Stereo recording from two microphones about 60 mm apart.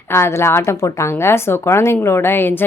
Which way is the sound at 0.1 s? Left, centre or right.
Left.